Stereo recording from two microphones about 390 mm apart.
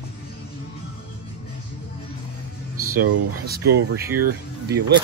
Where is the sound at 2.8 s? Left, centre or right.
Right.